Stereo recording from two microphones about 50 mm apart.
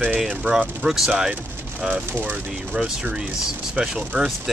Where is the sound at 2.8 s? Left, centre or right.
Centre.